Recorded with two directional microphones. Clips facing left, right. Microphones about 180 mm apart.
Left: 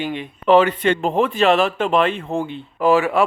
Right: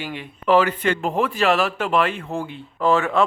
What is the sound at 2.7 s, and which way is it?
Speech, 15° left (ahead or behind).